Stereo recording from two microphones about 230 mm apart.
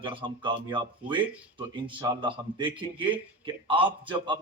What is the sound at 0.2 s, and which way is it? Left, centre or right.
Speech, right.